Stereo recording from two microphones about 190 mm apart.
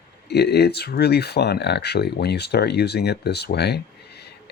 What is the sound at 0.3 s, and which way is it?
Speech, 60° left (ahead or behind).